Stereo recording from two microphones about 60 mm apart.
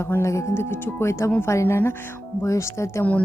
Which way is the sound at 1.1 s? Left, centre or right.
Left.